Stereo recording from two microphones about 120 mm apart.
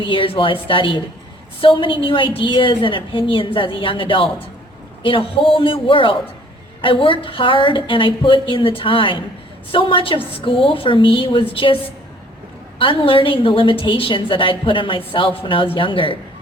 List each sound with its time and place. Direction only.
0.0 s a woman's voice: 45° left (ahead or behind)
12.8 s a woman's voice: 45° left (ahead or behind)